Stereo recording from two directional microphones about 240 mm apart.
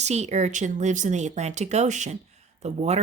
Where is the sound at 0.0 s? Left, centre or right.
Right.